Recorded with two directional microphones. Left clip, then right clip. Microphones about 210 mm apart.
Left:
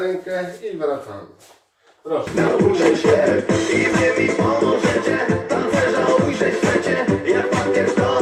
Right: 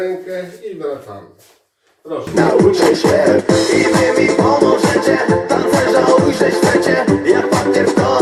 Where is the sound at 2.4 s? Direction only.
55° right (ahead or behind).